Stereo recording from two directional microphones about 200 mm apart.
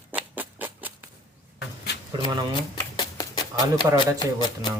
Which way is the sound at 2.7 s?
20° left (ahead or behind).